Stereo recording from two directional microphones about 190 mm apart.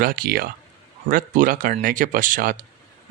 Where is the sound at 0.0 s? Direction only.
50° right (ahead or behind).